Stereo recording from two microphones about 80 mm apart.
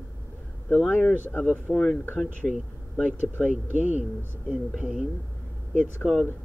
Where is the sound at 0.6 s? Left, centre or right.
Centre.